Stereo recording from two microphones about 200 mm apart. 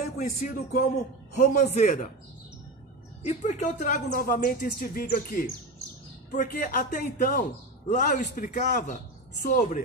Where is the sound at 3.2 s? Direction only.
35° left (ahead or behind).